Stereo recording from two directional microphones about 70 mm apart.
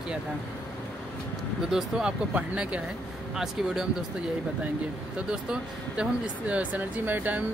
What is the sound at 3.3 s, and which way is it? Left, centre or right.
Speech, centre.